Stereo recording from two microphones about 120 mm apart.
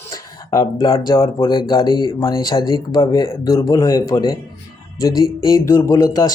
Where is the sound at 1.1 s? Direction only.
25° left (ahead or behind).